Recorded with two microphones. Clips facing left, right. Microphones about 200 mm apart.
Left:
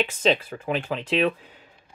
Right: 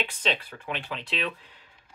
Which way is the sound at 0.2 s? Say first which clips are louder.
Left 8 dB; 45° left (ahead or behind).